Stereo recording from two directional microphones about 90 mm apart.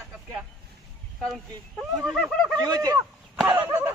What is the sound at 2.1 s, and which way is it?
Snicker, 5° left (ahead or behind).